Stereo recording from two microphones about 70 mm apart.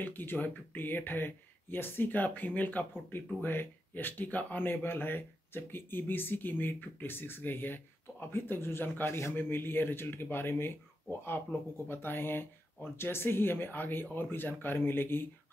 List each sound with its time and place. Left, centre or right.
0.0 s speech: left